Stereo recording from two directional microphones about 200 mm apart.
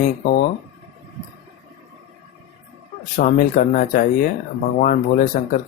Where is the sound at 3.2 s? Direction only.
45° left (ahead or behind).